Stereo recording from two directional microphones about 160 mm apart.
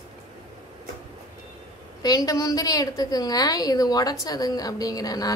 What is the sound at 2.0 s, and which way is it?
A woman's voice, 25° left (ahead or behind).